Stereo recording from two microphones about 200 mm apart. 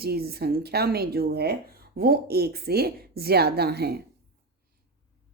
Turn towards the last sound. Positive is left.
turn(degrees=-55)  # may be behind; listen again after turning